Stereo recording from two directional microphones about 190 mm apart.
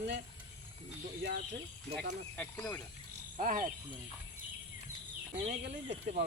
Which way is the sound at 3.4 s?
45° right (ahead or behind).